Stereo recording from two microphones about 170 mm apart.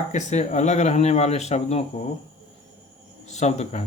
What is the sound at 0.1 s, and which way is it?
Speech, 45° left (ahead or behind).